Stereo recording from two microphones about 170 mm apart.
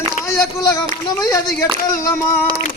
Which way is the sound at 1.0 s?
20° left (ahead or behind).